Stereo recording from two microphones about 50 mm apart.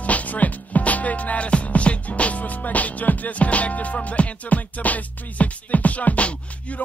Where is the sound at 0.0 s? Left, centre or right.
Left.